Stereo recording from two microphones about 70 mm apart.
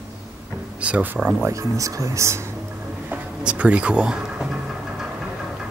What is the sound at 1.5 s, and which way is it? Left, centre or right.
Speech, right.